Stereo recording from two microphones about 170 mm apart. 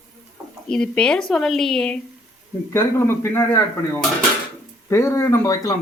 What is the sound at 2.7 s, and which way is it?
A woman's voice, 15° left (ahead or behind).